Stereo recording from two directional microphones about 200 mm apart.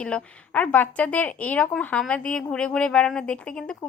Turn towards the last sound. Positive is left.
turn(degrees=5)  # may be behind; listen again after turning